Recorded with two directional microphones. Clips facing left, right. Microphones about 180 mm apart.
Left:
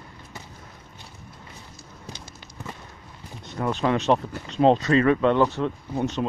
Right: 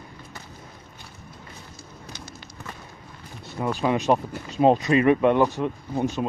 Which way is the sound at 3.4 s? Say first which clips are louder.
Even; 5° right (ahead or behind).